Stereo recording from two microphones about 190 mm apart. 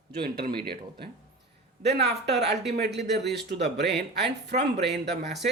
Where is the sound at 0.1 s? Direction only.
55° right (ahead or behind).